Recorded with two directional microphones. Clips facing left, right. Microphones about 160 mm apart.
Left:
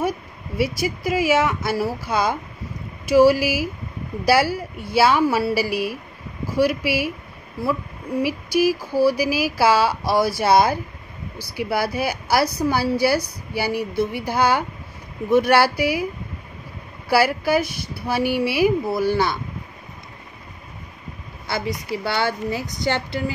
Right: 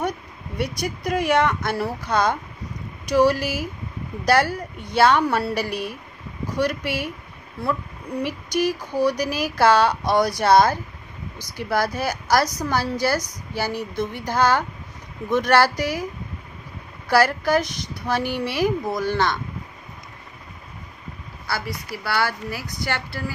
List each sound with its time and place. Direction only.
0.6 s a woman's voice: 5° left (ahead or behind)
8.2 s a woman's voice: 5° left (ahead or behind)
17.1 s a woman's voice: 10° left (ahead or behind)
21.5 s a woman's voice: 20° left (ahead or behind)